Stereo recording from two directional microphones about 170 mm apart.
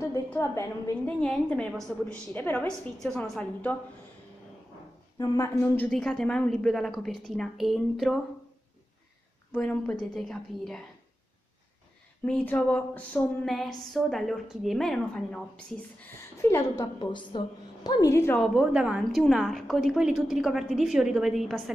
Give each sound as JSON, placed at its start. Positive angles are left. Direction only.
{"t": 0.1, "sound": "a woman's voice", "side_deg": 15}
{"t": 1.2, "sound": "a woman's voice", "side_deg": 5}
{"t": 5.2, "sound": "a woman's voice", "side_deg": 20}
{"t": 5.9, "sound": "a woman's voice", "side_deg": 5}
{"t": 9.5, "sound": "a woman's voice", "side_deg": 5}
{"t": 12.3, "sound": "a woman's voice", "side_deg": 5}
{"t": 16.3, "sound": "a woman's voice", "side_deg": 15}
{"t": 18.4, "sound": "a woman's voice", "side_deg": -5}